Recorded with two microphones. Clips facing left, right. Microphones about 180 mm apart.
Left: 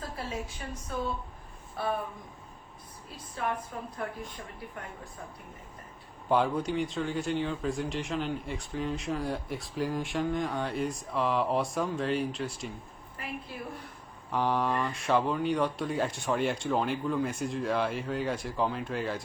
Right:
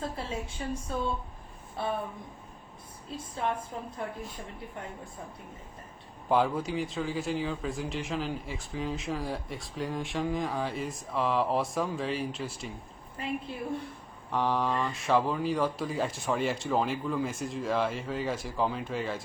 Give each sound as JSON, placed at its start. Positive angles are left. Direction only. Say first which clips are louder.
{"t": 0.0, "sound": "a sound", "louder": "right 3 dB", "side_deg": -25}
{"t": 0.9, "sound": "a woman's voice", "louder": "left 2 dB", "side_deg": -30}
{"t": 3.2, "sound": "a woman's voice", "louder": "right 1 dB", "side_deg": -25}
{"t": 6.2, "sound": "speech", "louder": "even", "side_deg": 0}
{"t": 14.3, "sound": "speech", "louder": "even", "side_deg": 0}